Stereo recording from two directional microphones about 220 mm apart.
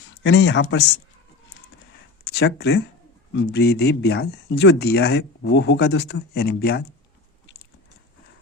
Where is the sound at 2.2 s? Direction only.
50° left (ahead or behind).